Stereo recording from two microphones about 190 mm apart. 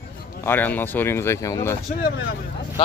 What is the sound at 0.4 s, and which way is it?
Speech, 10° left (ahead or behind).